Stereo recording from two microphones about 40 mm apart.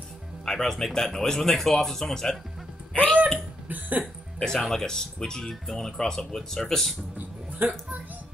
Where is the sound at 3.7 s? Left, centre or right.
Right.